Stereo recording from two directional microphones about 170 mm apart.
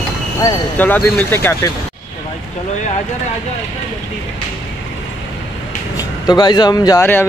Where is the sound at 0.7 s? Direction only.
10° left (ahead or behind).